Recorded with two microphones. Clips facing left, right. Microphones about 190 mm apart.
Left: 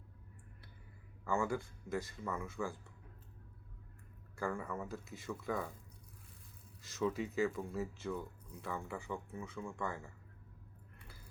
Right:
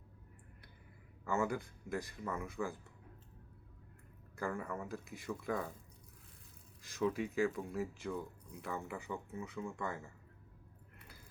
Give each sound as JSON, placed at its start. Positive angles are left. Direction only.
{"t": 1.3, "sound": "speech", "side_deg": -20}
{"t": 4.4, "sound": "speech", "side_deg": -15}
{"t": 6.8, "sound": "speech", "side_deg": -10}